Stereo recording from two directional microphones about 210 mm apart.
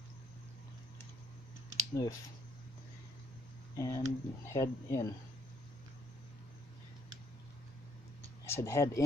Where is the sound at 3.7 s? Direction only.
15° left (ahead or behind).